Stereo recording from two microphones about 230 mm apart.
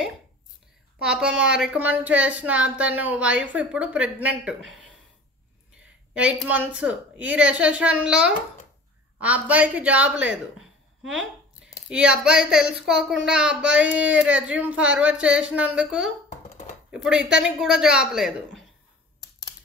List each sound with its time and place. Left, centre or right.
1.0 s a woman's voice: centre
6.1 s a woman's voice: centre
16.4 s a sound: left
16.9 s a woman's voice: centre